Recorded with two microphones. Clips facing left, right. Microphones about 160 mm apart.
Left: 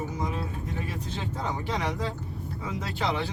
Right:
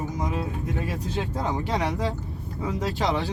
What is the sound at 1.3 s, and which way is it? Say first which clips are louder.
Speech: right 3 dB; 40° right (ahead or behind).